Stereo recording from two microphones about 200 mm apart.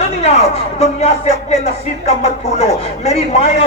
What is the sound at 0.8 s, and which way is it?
Speech, 30° left (ahead or behind).